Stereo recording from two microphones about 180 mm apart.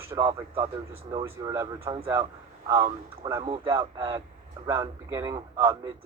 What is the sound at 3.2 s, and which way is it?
Speech, 15° right (ahead or behind).